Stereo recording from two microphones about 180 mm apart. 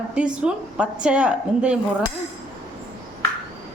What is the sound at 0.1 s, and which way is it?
Speech, 5° right (ahead or behind).